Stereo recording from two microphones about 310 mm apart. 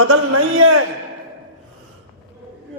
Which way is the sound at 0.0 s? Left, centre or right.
Right.